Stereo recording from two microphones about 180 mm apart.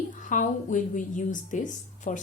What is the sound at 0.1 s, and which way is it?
A woman's voice, 45° left (ahead or behind).